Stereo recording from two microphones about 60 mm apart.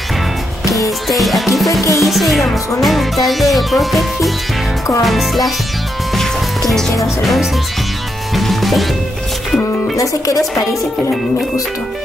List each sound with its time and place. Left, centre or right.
1.0 s music: centre
1.7 s speech: left
2.0 s music: centre
8.4 s music: centre
9.9 s speech: left